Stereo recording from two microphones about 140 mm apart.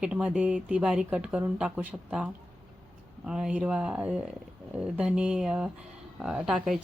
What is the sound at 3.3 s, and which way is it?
A woman's voice, 5° right (ahead or behind).